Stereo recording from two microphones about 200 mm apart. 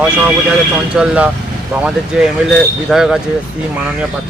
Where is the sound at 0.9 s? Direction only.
5° right (ahead or behind).